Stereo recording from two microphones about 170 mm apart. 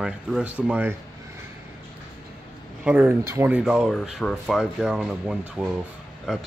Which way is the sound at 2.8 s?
10° right (ahead or behind).